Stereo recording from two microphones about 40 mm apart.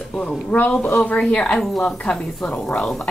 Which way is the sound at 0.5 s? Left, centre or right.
Left.